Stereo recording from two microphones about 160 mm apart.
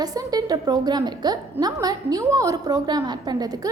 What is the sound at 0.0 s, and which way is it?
A woman's voice, 25° right (ahead or behind).